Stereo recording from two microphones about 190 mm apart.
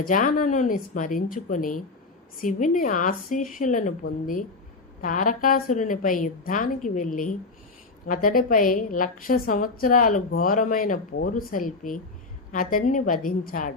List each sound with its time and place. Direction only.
0.0 s a woman's voice: 45° left (ahead or behind)